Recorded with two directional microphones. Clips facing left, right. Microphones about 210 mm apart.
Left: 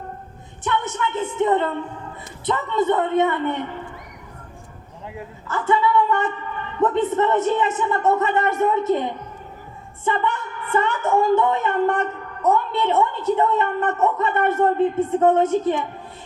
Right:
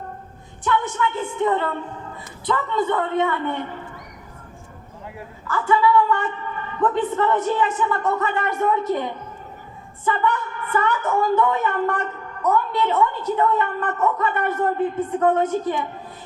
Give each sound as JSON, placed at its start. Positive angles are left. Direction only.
{"t": 0.6, "sound": "a woman's voice", "side_deg": 20}
{"t": 5.0, "sound": "a woman's voice", "side_deg": 20}